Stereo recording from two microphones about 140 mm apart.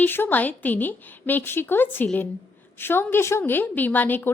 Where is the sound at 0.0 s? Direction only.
15° left (ahead or behind).